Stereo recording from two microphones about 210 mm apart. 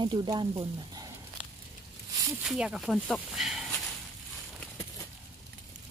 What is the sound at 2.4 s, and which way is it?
Speech, 5° right (ahead or behind).